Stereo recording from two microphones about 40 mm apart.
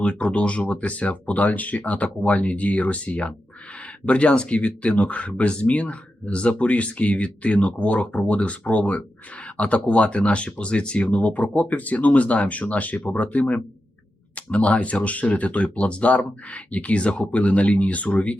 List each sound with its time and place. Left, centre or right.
0.0 s speech: left